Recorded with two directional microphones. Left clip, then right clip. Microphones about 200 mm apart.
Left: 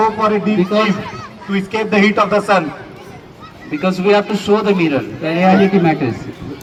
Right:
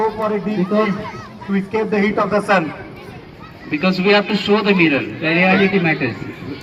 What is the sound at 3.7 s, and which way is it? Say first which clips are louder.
A man's voice: left 1 dB; 40° left (ahead or behind).